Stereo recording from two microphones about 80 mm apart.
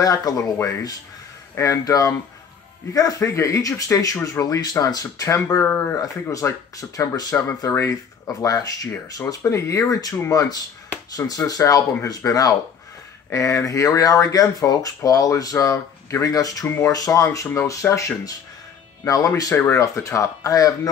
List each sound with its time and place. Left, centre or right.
0.0 s speech: left
0.6 s speech: left
5.6 s speech: left
6.3 s speech: left
16.6 s speech: left
16.9 s speech: left
19.5 s speech: left
19.8 s speech: left